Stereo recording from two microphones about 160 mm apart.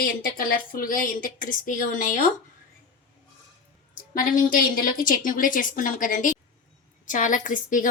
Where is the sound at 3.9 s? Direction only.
60° left (ahead or behind).